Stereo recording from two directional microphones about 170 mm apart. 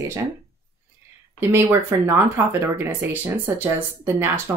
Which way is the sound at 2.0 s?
15° right (ahead or behind).